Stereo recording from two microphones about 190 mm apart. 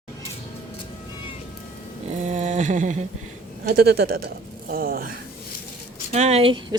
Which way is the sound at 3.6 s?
55° right (ahead or behind).